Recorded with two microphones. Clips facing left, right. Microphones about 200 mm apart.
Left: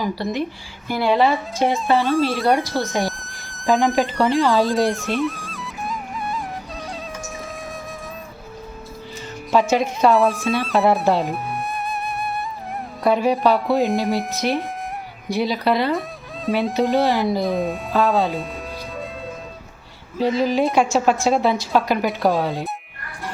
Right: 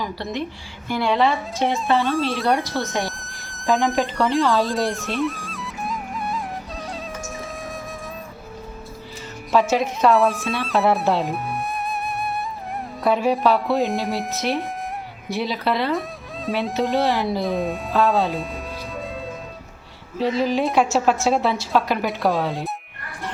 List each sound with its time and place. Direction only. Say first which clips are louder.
0.0 s speech: left 4 dB; 5° left (ahead or behind)
9.5 s speech: left 1 dB; centre (ahead or behind)
20.1 s speech: left 2 dB; centre (ahead or behind)